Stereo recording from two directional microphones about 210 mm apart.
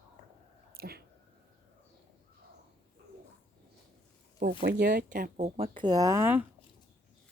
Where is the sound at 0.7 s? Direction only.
45° right (ahead or behind).